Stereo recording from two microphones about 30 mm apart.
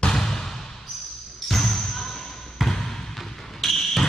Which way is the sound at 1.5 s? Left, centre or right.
Centre.